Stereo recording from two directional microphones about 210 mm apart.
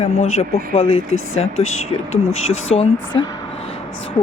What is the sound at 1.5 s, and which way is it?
Speech, 80° left.